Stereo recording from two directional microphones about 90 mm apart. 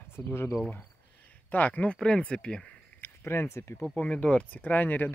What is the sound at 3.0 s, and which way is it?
Speech, 25° left (ahead or behind).